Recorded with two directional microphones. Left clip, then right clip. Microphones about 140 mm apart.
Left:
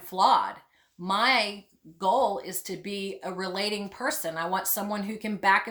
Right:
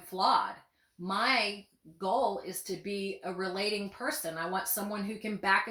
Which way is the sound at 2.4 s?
20° left (ahead or behind).